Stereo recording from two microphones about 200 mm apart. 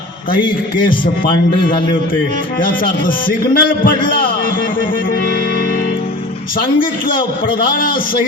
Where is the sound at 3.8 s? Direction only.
45° left (ahead or behind).